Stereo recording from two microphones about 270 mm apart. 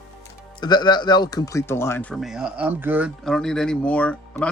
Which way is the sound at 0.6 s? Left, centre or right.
Centre.